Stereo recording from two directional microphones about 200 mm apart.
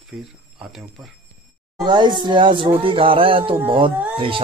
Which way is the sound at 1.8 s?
20° right (ahead or behind).